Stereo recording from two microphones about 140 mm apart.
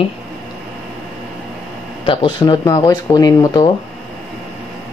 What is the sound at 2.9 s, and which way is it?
Speech, 30° left (ahead or behind).